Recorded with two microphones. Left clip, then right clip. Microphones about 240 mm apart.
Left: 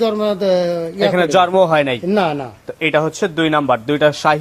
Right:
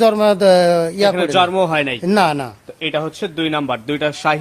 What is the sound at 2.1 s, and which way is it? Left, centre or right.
Speech, right.